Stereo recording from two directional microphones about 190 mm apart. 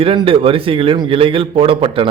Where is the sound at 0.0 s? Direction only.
25° right (ahead or behind).